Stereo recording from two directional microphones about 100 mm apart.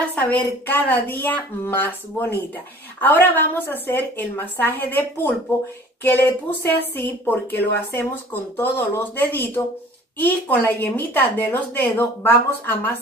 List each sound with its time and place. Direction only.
0.1 s a woman's voice: 15° left (ahead or behind)